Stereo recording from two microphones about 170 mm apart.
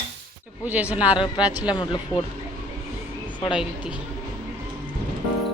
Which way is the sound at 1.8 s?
25° left (ahead or behind).